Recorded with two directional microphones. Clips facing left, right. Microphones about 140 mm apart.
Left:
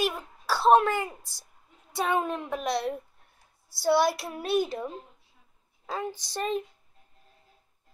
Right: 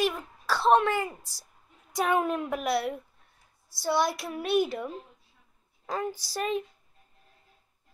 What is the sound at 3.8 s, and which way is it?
Speech, 5° left (ahead or behind).